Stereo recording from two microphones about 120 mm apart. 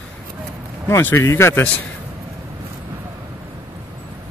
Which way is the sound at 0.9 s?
20° left (ahead or behind).